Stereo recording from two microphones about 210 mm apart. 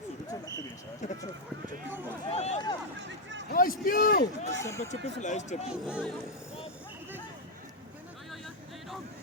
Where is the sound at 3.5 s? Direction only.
45° left (ahead or behind).